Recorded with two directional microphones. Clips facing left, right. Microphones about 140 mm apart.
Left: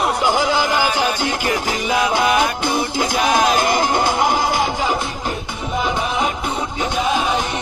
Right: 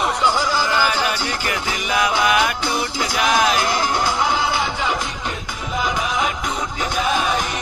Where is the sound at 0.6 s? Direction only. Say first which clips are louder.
Left 2 dB; 15° left (ahead or behind).